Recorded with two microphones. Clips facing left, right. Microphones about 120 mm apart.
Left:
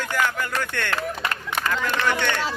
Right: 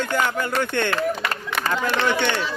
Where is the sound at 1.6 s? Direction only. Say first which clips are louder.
Right 2 dB; 25° right (ahead or behind).